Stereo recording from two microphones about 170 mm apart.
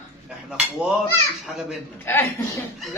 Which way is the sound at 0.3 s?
5° right (ahead or behind).